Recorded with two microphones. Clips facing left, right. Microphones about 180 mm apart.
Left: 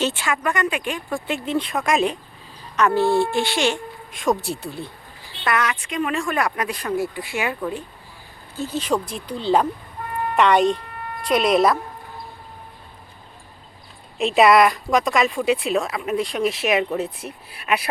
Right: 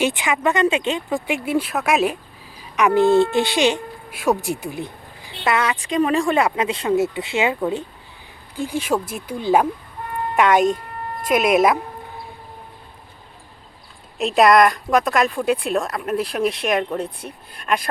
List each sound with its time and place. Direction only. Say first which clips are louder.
0.0 s speech: right 3 dB; 15° right (ahead or behind)
4.1 s speech: right 2 dB; 5° right (ahead or behind)
5.5 s speech: right 3 dB; 30° right (ahead or behind)
8.5 s speech: right 1 dB; 10° right (ahead or behind)
14.2 s speech: right 1 dB; centre (ahead or behind)